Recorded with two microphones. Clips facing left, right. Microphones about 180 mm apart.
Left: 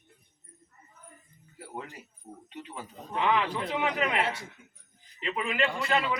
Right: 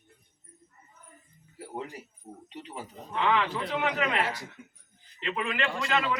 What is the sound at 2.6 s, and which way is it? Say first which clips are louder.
Speech: right 1 dB; 25° right (ahead or behind).